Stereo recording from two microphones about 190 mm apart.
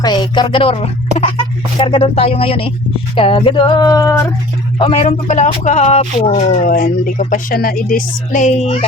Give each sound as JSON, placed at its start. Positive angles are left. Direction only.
{"t": 0.0, "sound": "speech", "side_deg": 20}
{"t": 4.8, "sound": "speech", "side_deg": 35}